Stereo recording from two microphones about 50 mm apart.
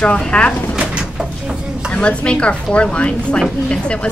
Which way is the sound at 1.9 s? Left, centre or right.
Left.